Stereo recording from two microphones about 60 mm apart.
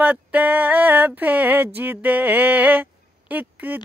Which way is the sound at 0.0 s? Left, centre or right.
Right.